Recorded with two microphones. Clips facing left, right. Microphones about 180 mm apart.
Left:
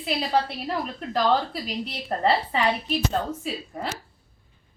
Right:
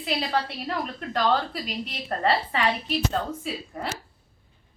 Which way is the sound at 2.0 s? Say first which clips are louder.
Left 1 dB; 15° left (ahead or behind).